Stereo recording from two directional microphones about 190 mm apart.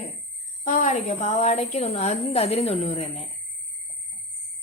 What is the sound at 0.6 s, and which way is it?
A woman's voice, 40° left (ahead or behind).